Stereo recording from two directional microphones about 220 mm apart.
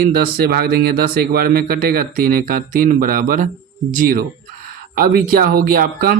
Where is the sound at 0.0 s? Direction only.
45° right (ahead or behind).